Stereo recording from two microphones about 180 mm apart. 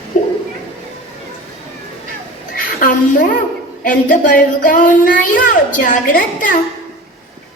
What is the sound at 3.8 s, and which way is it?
Speech, 50° left (ahead or behind).